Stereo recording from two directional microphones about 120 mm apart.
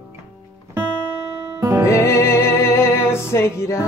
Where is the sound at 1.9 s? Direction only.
25° left (ahead or behind).